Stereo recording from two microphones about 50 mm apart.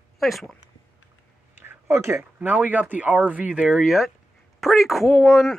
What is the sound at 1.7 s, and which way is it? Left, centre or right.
Speech, right.